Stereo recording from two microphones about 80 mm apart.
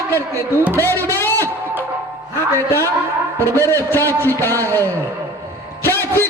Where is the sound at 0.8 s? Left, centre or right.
Left.